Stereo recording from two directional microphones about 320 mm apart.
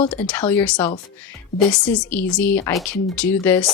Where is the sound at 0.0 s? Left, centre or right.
Centre.